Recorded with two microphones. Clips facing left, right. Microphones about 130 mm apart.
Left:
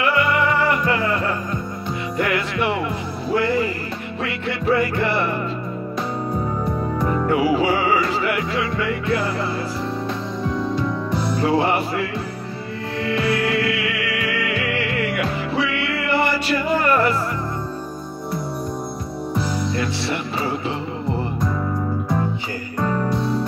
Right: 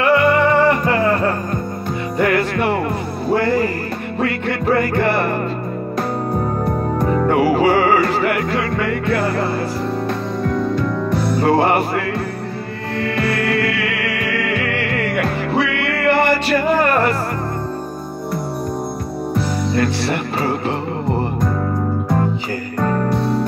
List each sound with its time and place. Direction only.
0.2 s music: 45° right (ahead or behind)
2.2 s speech: 45° right (ahead or behind)
6.3 s music: 55° right (ahead or behind)
19.3 s music: 60° right (ahead or behind)
22.8 s music: 55° right (ahead or behind)